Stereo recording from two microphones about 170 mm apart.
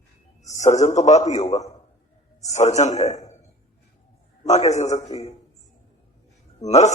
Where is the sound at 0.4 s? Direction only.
45° left (ahead or behind).